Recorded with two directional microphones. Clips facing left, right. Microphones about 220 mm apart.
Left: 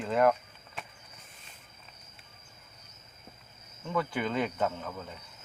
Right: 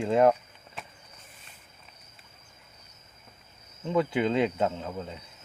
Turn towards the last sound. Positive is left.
turn(degrees=-25)  # may be behind; listen again after turning